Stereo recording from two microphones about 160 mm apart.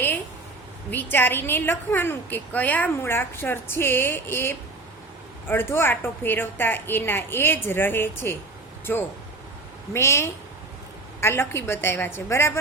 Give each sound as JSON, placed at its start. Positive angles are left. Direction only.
{"t": 1.1, "sound": "a woman's voice", "side_deg": 15}